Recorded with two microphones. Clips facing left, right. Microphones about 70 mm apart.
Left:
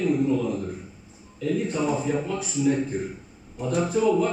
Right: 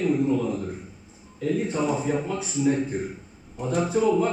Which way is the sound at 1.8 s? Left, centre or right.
Centre.